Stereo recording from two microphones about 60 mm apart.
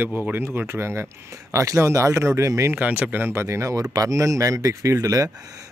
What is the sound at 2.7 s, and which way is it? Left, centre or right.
A man's voice, right.